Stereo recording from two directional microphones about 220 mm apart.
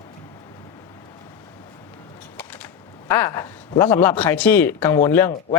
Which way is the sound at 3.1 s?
15° left (ahead or behind).